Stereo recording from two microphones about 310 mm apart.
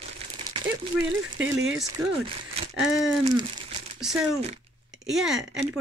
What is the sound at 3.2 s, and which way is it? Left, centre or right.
Crumpling, centre.